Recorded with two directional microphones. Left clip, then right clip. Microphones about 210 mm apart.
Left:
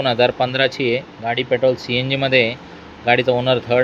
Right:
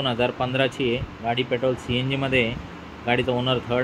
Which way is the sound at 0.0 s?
25° left (ahead or behind).